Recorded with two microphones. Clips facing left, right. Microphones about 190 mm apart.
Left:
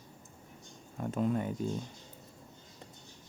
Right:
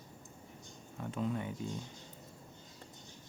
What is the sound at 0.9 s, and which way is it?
Speech, 45° left (ahead or behind).